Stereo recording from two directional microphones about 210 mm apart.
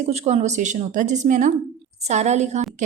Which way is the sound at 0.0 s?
30° right (ahead or behind).